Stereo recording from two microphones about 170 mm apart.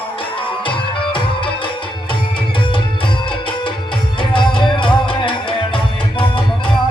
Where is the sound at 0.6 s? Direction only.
30° left (ahead or behind).